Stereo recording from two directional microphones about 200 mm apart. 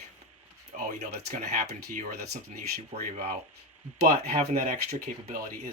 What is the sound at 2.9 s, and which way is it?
Speech, 35° right (ahead or behind).